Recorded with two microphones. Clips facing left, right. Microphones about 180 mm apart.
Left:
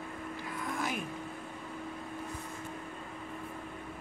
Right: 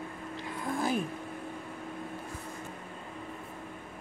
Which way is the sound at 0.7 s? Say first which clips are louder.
Right 7 dB; 30° right (ahead or behind).